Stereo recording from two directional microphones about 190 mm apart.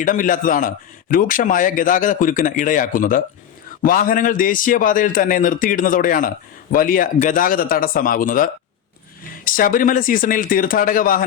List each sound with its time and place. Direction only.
0.0 s a man's voice: 45° left (ahead or behind)